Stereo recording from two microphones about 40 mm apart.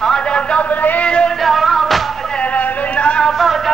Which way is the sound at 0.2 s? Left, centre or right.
Left.